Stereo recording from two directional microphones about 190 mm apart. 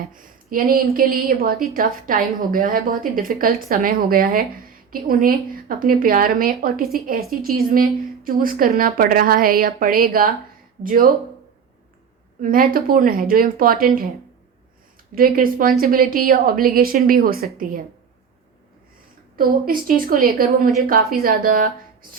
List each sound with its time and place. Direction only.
0.1 s speech: 45° right (ahead or behind)
12.4 s speech: 50° right (ahead or behind)
15.1 s speech: 50° right (ahead or behind)
19.4 s speech: 50° right (ahead or behind)